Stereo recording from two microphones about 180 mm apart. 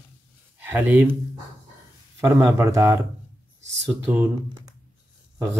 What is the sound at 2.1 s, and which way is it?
Speech, 20° right (ahead or behind).